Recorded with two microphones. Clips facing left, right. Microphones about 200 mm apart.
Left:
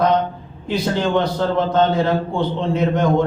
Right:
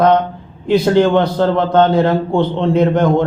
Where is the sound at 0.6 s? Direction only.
60° right (ahead or behind).